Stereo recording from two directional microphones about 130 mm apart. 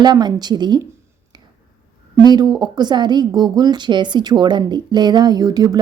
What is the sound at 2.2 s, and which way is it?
A woman's voice, 30° right (ahead or behind).